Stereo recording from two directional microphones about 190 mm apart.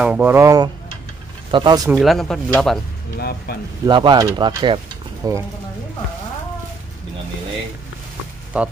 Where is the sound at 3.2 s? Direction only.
55° left (ahead or behind).